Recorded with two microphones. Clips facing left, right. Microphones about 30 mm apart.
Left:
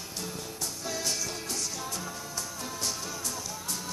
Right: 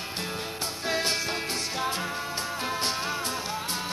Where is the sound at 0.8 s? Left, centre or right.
Right.